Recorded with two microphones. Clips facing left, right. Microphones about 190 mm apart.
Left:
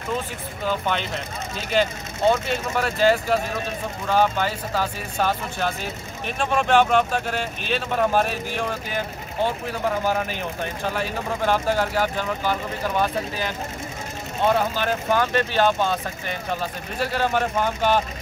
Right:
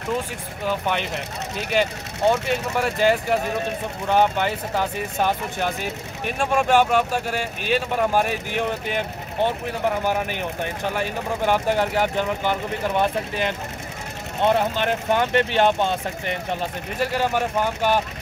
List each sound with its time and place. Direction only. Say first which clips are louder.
0.7 s speech: right 1 dB; 15° right (ahead or behind)